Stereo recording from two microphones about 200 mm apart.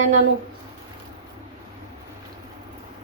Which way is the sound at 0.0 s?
65° right (ahead or behind).